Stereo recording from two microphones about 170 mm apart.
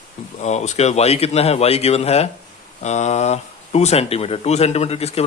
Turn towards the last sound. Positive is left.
turn(degrees=35)  # may be behind; listen again after turning